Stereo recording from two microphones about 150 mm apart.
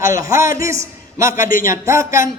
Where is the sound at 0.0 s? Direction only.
20° right (ahead or behind).